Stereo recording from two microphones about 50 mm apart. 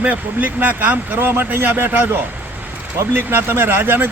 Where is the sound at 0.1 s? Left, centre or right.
Right.